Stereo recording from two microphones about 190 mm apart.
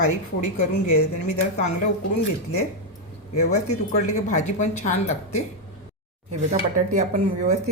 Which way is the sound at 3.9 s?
40° left (ahead or behind).